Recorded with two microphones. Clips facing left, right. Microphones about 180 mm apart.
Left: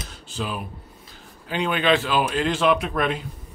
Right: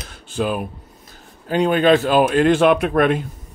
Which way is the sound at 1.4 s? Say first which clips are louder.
Right 7 dB; 45° right (ahead or behind).